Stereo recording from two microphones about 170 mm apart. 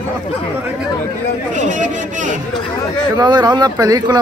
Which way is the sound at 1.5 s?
45° right (ahead or behind).